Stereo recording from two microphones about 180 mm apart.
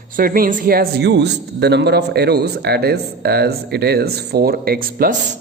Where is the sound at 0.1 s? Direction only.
50° right (ahead or behind).